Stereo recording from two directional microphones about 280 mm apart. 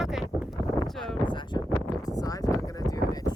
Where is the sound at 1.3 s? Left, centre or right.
Centre.